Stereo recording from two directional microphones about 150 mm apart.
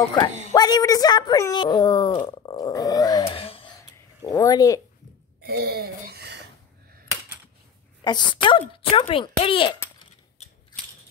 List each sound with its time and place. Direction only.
0.6 s speech: 25° left (ahead or behind)
3.3 s gasp: 40° left (ahead or behind)
4.3 s speech: 20° left (ahead or behind)
5.4 s a sound: 90° right
8.0 s a child's voice: 30° left (ahead or behind)